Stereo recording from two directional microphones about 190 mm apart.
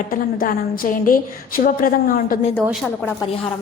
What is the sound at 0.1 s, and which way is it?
A woman's voice, 50° left (ahead or behind).